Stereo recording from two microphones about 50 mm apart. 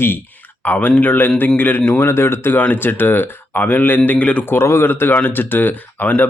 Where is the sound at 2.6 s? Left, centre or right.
Left.